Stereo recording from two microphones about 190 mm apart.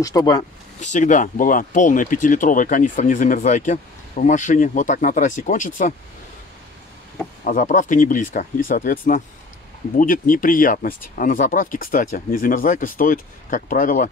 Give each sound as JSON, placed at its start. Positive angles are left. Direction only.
{"t": 0.0, "sound": "speech", "side_deg": 20}
{"t": 0.7, "sound": "speech", "side_deg": 40}
{"t": 7.4, "sound": "speech", "side_deg": 45}